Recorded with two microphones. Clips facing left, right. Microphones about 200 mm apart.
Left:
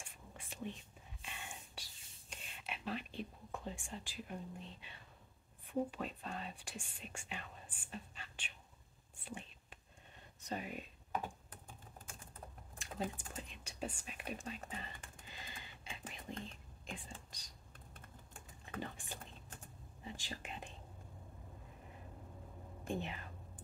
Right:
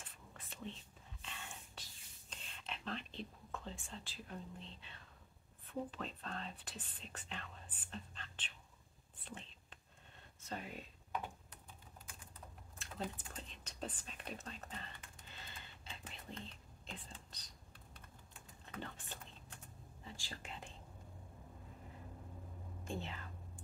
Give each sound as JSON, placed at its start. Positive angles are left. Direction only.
{"t": 0.0, "sound": "whispering", "side_deg": 10}
{"t": 5.7, "sound": "speech", "side_deg": 10}
{"t": 9.2, "sound": "whispering", "side_deg": 10}
{"t": 10.4, "sound": "speech", "side_deg": 15}
{"t": 11.1, "sound": "typing", "side_deg": 50}
{"t": 12.7, "sound": "typing", "side_deg": 15}
{"t": 13.3, "sound": "whispering", "side_deg": 10}
{"t": 15.2, "sound": "a sound", "side_deg": 15}
{"t": 16.8, "sound": "whispering", "side_deg": 15}
{"t": 17.7, "sound": "typing", "side_deg": 50}
{"t": 18.8, "sound": "a sound", "side_deg": 10}
{"t": 20.0, "sound": "whispering", "side_deg": 20}
{"t": 22.9, "sound": "whispering", "side_deg": 15}